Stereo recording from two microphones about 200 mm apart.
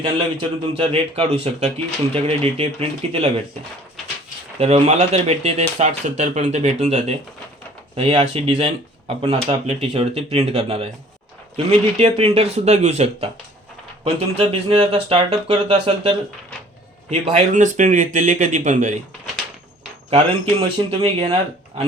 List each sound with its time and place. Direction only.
0.2 s speech: 25° right (ahead or behind)
4.6 s speech: 30° right (ahead or behind)
20.1 s speech: 30° right (ahead or behind)